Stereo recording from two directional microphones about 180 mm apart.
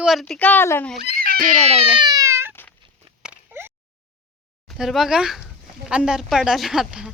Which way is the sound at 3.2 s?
10° right (ahead or behind).